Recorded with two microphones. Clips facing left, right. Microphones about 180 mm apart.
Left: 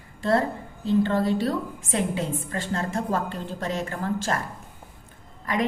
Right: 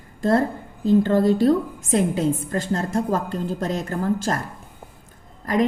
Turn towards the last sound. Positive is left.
turn(degrees=-40)  # may be behind; listen again after turning